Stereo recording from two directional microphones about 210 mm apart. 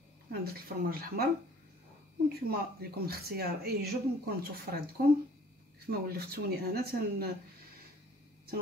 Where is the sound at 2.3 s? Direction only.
45° right (ahead or behind).